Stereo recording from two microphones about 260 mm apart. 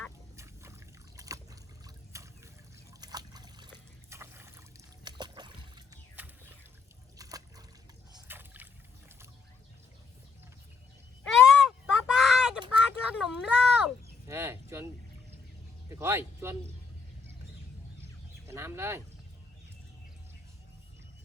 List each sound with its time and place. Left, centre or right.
0.3 s trickle: centre
5.0 s a sound: centre
7.2 s trickle: centre
8.1 s boat: centre
11.2 s a sound: centre
15.9 s speech: centre
18.0 s bird: centre